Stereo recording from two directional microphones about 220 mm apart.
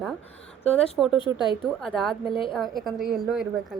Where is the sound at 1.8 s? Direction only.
Centre (ahead or behind).